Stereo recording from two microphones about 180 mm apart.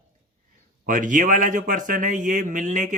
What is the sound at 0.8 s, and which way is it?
A man's voice, 45° right (ahead or behind).